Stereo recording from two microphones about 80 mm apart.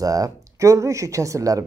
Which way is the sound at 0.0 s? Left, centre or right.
Right.